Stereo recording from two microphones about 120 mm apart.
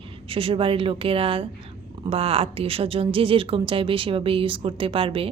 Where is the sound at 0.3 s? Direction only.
50° right (ahead or behind).